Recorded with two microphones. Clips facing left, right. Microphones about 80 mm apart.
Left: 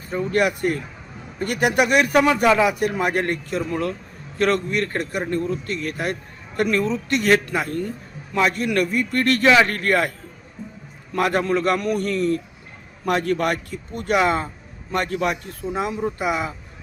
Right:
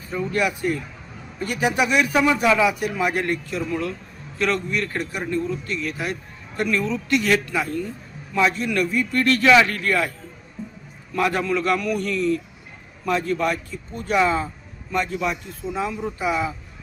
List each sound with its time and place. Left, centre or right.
0.1 s a man's voice: left
6.8 s a man's voice: left
7.4 s a man's voice: left
11.1 s a man's voice: left
13.1 s speech: left
15.7 s speech: left